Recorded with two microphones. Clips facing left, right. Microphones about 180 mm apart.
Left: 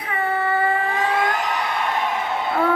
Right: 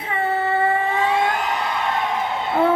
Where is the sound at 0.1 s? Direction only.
25° right (ahead or behind).